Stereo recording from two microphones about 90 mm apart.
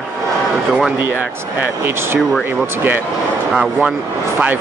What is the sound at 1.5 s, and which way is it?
Speech, 25° right (ahead or behind).